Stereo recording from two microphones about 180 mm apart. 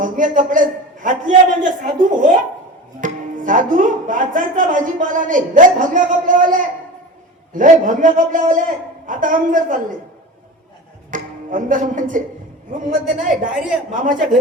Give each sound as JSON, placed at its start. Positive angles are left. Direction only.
{"t": 0.0, "sound": "speech", "side_deg": -45}
{"t": 11.1, "sound": "speech", "side_deg": -45}